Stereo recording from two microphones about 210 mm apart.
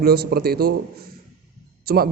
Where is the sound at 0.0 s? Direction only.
50° right (ahead or behind).